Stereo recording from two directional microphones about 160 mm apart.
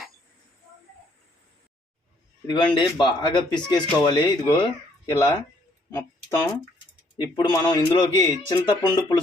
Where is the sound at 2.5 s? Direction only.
30° left (ahead or behind).